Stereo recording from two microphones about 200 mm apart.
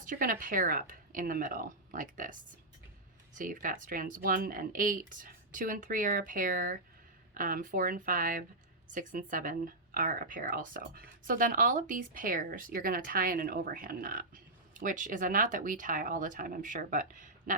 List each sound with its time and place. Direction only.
0.0 s speech: 45° right (ahead or behind)